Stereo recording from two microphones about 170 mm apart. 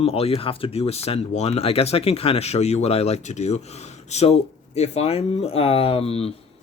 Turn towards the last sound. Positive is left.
turn(degrees=35)  # may be behind; listen again after turning